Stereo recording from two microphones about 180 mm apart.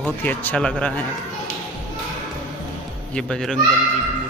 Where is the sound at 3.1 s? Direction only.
5° left (ahead or behind).